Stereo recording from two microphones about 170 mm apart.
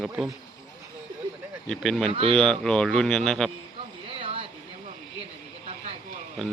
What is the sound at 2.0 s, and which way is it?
Speech, 30° right (ahead or behind).